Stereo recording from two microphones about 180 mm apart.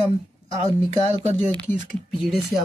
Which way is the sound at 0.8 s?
35° right (ahead or behind).